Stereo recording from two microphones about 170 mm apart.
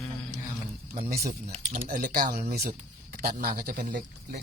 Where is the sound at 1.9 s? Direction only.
60° right (ahead or behind).